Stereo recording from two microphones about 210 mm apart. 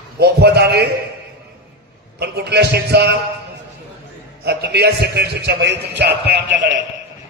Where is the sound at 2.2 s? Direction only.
50° right (ahead or behind).